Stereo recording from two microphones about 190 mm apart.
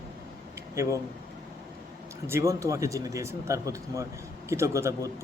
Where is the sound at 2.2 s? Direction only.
15° right (ahead or behind).